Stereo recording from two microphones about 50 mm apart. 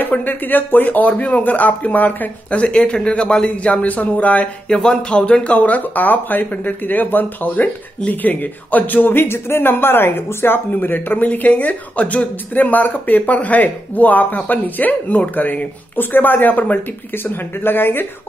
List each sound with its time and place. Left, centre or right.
0.0 s speech: left
4.6 s speech: centre
5.2 s speech: left
17.2 s speech: left